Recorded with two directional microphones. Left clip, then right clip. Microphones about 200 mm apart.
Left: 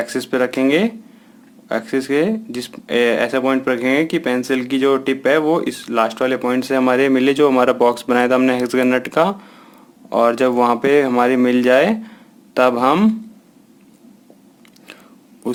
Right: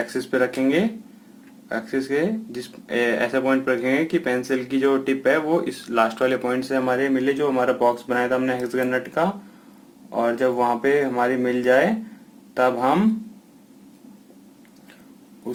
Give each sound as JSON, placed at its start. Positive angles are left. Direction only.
{"t": 0.0, "sound": "speech", "side_deg": 35}